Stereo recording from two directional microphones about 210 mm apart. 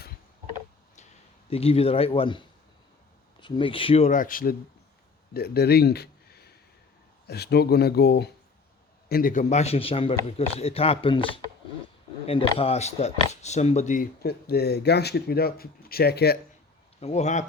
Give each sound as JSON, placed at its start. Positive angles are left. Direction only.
{"t": 1.5, "sound": "a man's voice", "side_deg": 30}
{"t": 3.4, "sound": "a man's voice", "side_deg": 25}
{"t": 17.0, "sound": "speech", "side_deg": 30}